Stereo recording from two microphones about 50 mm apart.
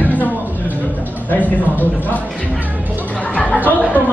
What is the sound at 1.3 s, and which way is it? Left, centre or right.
Speech, left.